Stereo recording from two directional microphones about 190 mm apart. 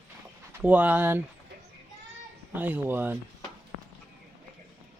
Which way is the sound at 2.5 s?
10° right (ahead or behind).